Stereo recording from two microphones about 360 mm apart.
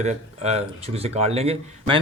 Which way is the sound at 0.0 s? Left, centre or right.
Centre.